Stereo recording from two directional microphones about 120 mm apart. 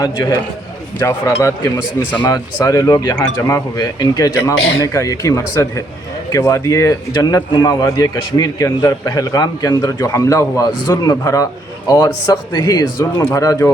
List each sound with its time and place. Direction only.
0.0 s a man's voice: 30° left (ahead or behind)